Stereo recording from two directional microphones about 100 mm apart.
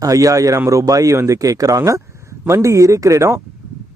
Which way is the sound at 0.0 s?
35° right (ahead or behind).